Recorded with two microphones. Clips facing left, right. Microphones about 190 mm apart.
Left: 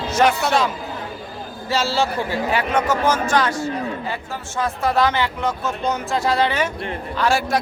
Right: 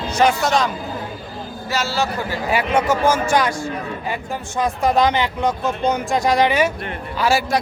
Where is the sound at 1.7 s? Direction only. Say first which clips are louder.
Left 2 dB; 30° left (ahead or behind).